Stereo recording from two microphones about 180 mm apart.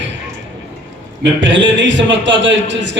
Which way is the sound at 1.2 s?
90° right.